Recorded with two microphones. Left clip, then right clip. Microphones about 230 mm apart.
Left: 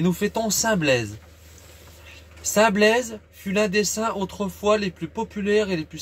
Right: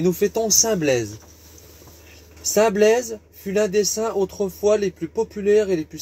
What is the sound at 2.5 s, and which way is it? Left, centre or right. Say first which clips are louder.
Speech: right 2 dB; centre.